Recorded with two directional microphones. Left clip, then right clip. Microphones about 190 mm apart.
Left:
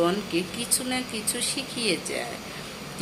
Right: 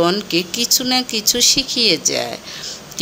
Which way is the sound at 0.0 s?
35° right (ahead or behind).